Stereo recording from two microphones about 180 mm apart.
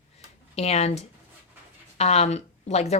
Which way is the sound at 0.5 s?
35° left (ahead or behind).